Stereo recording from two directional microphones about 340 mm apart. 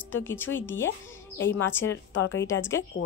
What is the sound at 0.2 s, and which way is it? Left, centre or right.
Speech, centre.